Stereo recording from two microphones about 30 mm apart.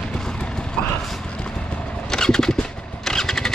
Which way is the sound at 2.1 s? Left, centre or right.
Centre.